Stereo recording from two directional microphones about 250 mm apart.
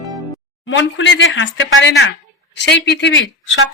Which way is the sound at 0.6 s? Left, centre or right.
Left.